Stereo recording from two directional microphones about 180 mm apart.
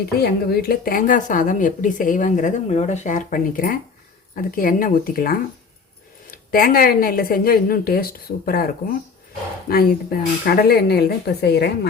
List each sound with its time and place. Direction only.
0.2 s a woman's voice: 60° left (ahead or behind)